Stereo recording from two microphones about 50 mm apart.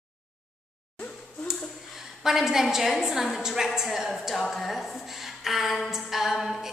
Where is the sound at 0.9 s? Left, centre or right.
Left.